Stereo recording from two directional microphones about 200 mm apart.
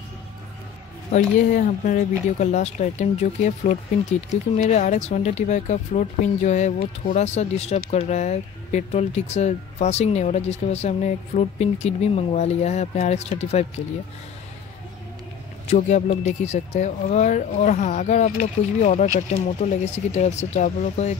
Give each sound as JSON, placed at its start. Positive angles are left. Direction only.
{"t": 1.1, "sound": "speech", "side_deg": 40}
{"t": 15.6, "sound": "speech", "side_deg": 30}